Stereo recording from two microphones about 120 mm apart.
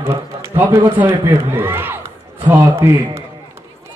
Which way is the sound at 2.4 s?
30° right (ahead or behind).